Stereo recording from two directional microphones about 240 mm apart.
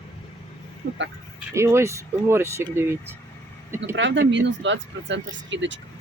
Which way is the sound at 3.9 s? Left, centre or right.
Right.